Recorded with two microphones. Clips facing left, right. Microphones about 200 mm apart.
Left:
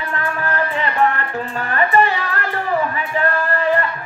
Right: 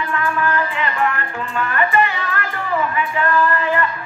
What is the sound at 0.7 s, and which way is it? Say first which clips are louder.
Music: left 3 dB; 35° left (ahead or behind).